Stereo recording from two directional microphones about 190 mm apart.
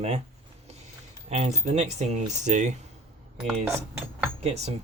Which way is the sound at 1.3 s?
35° right (ahead or behind).